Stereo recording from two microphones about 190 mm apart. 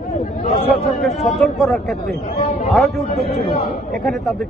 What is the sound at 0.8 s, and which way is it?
Speech, centre (ahead or behind).